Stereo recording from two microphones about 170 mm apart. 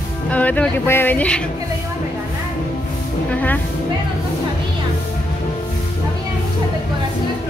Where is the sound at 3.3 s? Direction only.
10° left (ahead or behind).